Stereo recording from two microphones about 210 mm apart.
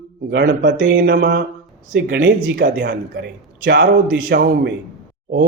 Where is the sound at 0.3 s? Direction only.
50° right (ahead or behind).